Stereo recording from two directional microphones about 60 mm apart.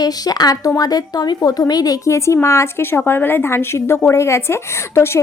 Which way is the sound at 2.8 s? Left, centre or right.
Left.